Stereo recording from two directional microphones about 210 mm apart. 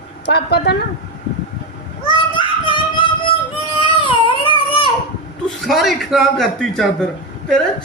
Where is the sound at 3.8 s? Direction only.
25° left (ahead or behind).